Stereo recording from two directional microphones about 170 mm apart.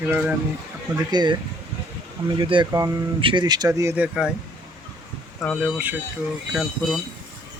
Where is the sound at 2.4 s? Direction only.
30° right (ahead or behind).